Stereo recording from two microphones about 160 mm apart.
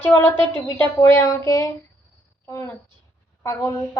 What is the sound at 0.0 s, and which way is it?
A woman's voice, 15° left (ahead or behind).